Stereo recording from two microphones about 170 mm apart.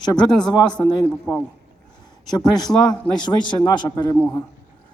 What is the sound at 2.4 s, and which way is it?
A man's voice, 25° left (ahead or behind).